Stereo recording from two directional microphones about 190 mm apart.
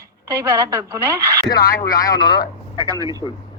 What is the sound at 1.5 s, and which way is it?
Speech, 50° left (ahead or behind).